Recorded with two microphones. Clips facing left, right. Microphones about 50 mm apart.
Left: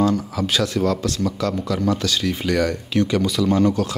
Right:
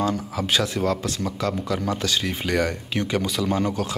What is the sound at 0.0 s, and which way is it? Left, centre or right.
Speech, right.